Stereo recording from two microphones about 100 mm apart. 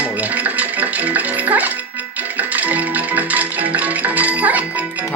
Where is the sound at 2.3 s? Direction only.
15° right (ahead or behind).